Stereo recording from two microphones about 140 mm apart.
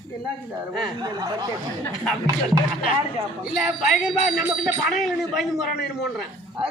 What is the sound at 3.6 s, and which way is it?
Speech, 5° right (ahead or behind).